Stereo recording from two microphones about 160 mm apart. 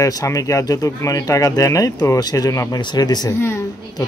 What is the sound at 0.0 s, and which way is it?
A woman's voice, 20° left (ahead or behind).